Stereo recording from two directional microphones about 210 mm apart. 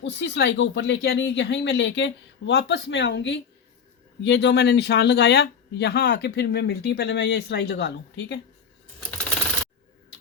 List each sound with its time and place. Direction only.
0.0 s speech: 55° left (ahead or behind)